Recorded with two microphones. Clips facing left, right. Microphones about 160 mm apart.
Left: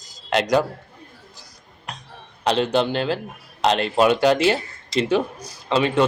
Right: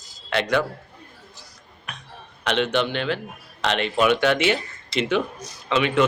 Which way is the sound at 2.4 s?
35° left (ahead or behind).